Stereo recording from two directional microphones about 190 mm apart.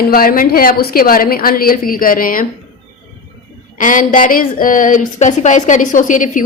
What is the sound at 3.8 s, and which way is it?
A woman's voice, 45° left (ahead or behind).